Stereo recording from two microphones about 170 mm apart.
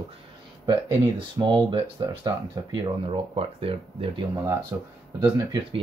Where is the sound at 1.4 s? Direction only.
25° right (ahead or behind).